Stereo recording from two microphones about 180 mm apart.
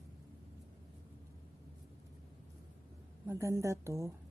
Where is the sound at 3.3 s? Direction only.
15° right (ahead or behind).